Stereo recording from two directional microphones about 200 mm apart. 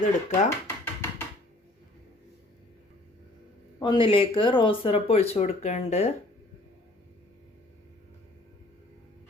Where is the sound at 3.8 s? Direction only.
25° left (ahead or behind).